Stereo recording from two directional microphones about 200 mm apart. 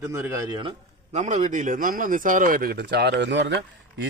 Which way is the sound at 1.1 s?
35° right (ahead or behind).